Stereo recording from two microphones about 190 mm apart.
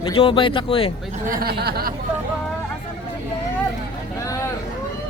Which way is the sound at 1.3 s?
55° right (ahead or behind).